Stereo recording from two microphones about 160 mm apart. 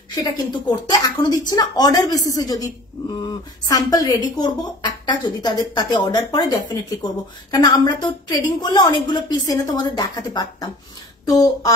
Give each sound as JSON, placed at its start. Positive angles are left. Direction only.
{"t": 0.1, "sound": "a woman's voice", "side_deg": 25}